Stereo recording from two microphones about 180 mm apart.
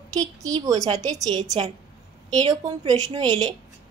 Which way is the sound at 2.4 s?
20° right (ahead or behind).